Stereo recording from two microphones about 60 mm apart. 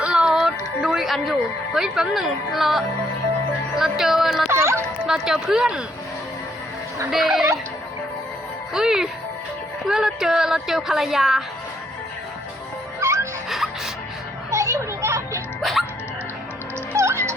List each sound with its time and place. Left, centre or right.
0.0 s music: centre
0.3 s speech: centre
3.8 s music: centre
4.5 s speech: right
5.0 s a woman's voice: centre
7.1 s music: centre
8.7 s a woman's voice: centre
13.5 s music: centre
14.5 s a sound: right
16.9 s a sound: right